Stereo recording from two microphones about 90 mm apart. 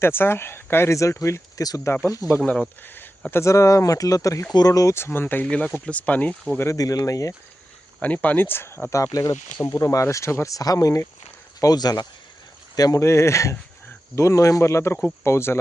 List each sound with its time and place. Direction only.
0.0 s speech: 25° left (ahead or behind)
2.8 s speech: 20° left (ahead or behind)
3.4 s speech: 35° left (ahead or behind); by 6.3 s 15° left (ahead or behind)
6.6 s speech: 35° left (ahead or behind)
8.0 s speech: 15° left (ahead or behind)